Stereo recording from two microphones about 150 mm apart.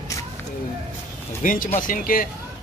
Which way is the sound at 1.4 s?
65° left (ahead or behind).